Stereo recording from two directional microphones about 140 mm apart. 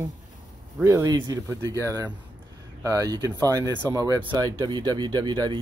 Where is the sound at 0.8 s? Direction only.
20° right (ahead or behind).